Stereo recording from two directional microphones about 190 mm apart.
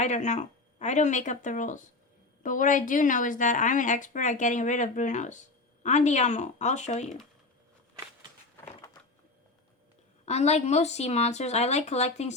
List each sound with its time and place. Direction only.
0.0 s a woman's voice: 40° left (ahead or behind)
10.2 s speech: 35° left (ahead or behind)